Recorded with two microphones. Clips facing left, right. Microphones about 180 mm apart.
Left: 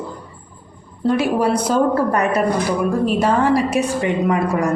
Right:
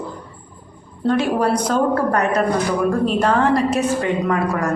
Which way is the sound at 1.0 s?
5° left (ahead or behind).